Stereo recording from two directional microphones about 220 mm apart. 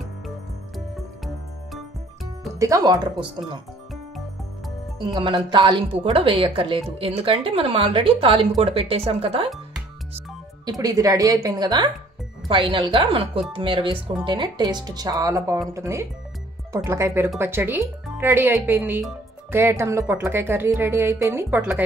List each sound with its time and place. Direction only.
0.7 s music: centre (ahead or behind)
2.6 s speech: 15° right (ahead or behind)
4.9 s a woman's voice: 20° right (ahead or behind)
10.6 s a woman's voice: 15° right (ahead or behind)